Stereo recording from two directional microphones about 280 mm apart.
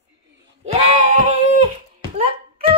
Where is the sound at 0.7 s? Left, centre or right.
Right.